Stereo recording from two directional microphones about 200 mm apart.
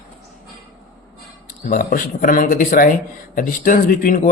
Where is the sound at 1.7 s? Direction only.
45° left (ahead or behind).